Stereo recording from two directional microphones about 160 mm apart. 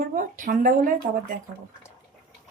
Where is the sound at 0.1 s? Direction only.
55° right (ahead or behind).